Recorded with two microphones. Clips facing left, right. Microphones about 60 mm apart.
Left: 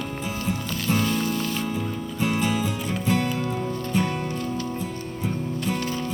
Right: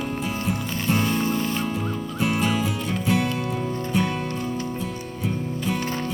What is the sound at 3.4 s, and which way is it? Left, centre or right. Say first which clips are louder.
Music: even; centre.